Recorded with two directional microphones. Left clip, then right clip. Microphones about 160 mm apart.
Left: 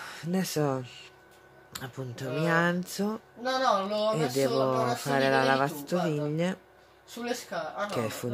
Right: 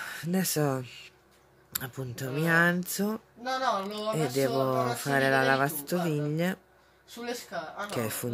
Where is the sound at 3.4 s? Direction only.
65° left (ahead or behind).